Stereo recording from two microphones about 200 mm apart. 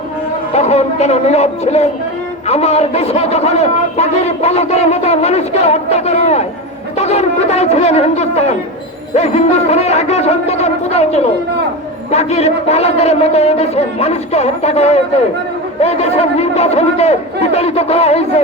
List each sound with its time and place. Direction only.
0.5 s a man's voice: 35° left (ahead or behind)